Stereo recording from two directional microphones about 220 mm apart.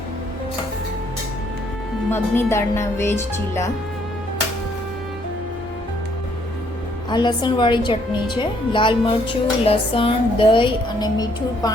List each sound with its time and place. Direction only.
2.1 s speech: 10° left (ahead or behind)
7.1 s a woman's voice: 20° left (ahead or behind)